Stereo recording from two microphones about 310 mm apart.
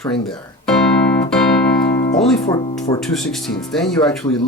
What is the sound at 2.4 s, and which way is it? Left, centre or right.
Speech, centre.